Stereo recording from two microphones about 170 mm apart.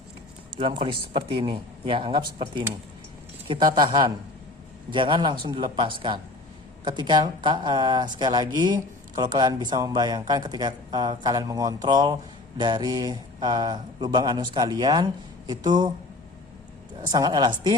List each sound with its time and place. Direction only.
0.5 s speech: 30° right (ahead or behind)
17.1 s speech: 25° right (ahead or behind)